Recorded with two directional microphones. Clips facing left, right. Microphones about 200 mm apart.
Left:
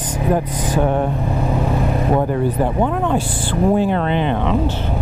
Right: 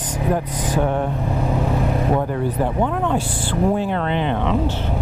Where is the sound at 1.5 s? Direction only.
20° left (ahead or behind).